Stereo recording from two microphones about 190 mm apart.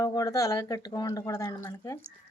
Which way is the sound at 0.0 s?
20° left (ahead or behind).